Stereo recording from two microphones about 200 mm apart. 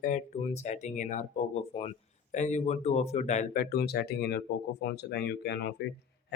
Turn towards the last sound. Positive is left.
turn(degrees=55)  # may be behind; listen again after turning